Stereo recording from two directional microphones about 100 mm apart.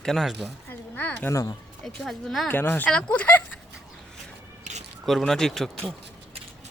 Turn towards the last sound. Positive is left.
turn(degrees=5)  # may be behind; listen again after turning